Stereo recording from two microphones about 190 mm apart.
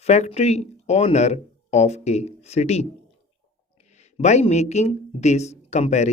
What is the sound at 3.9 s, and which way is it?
Speech, 35° left (ahead or behind).